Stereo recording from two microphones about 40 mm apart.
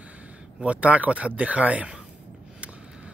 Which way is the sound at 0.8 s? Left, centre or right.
Right.